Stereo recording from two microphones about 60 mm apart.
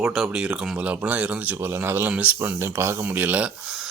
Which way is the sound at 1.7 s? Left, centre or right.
Right.